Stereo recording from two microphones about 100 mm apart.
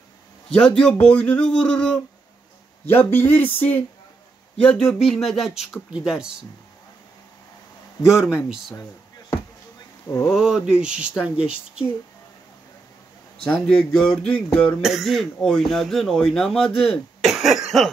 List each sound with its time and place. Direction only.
0.5 s speech: 10° left (ahead or behind)
2.9 s speech: 20° left (ahead or behind); by 6.3 s 5° right (ahead or behind)
8.0 s speech: 5° right (ahead or behind)
10.3 s speech: 5° right (ahead or behind)
13.5 s speech: 5° left (ahead or behind)
14.8 s speech: 5° right (ahead or behind)